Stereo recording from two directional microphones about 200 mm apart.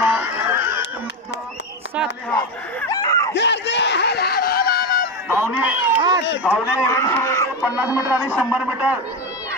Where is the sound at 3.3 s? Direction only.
60° left (ahead or behind).